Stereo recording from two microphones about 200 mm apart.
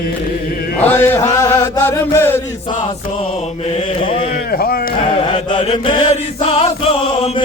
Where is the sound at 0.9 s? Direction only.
10° left (ahead or behind).